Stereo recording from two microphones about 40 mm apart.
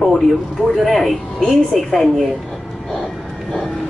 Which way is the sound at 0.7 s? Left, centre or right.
Centre.